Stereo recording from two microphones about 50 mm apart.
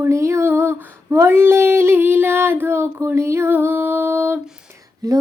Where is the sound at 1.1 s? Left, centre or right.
Right.